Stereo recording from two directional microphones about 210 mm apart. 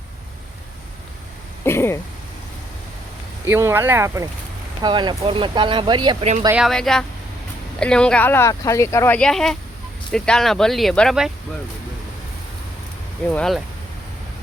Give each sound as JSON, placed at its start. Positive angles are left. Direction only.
{"t": 1.6, "sound": "throat clearing", "side_deg": 10}
{"t": 3.4, "sound": "speech", "side_deg": -10}
{"t": 6.4, "sound": "speech", "side_deg": -10}
{"t": 6.7, "sound": "speech", "side_deg": 0}
{"t": 13.3, "sound": "speech", "side_deg": 0}